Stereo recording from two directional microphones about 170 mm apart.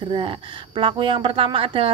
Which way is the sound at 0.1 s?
30° right (ahead or behind).